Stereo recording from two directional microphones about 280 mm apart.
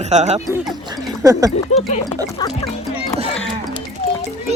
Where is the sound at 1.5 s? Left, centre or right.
Left.